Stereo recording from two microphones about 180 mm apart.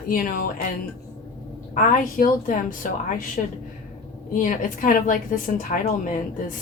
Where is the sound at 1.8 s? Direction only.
50° left (ahead or behind).